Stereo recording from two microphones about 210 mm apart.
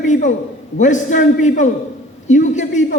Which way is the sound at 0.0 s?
35° left (ahead or behind).